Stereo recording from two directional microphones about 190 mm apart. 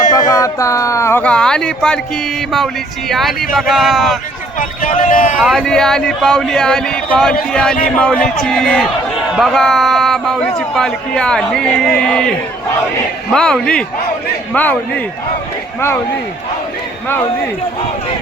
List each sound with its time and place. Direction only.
0.1 s speech: 20° left (ahead or behind); by 2.0 s 5° left (ahead or behind)
3.1 s speech: centre (ahead or behind)
4.8 s speech: 45° left (ahead or behind)
5.4 s speech: centre (ahead or behind)
13.3 s speech: 5° left (ahead or behind)